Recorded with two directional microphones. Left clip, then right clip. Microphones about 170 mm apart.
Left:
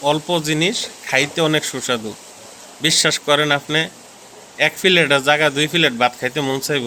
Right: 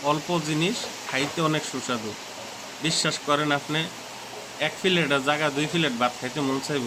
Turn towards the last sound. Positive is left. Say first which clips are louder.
# left 7 dB
turn(degrees=30)  # may be behind; listen again after turning